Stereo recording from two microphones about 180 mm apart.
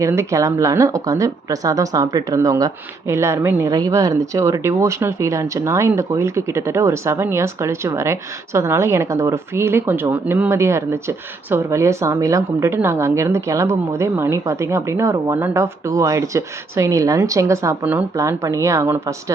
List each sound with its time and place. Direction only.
0.0 s speech: 15° right (ahead or behind)